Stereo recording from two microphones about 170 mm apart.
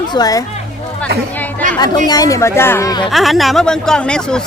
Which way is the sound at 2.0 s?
20° left (ahead or behind).